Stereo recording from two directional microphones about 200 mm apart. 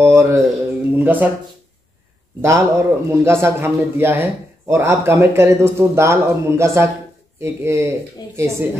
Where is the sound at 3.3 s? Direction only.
10° right (ahead or behind).